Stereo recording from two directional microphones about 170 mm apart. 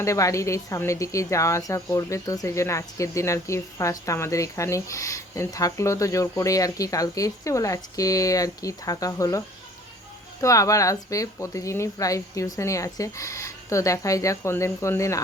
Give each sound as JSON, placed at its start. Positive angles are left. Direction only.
{"t": 0.0, "sound": "speech", "side_deg": 20}
{"t": 10.4, "sound": "speech", "side_deg": 20}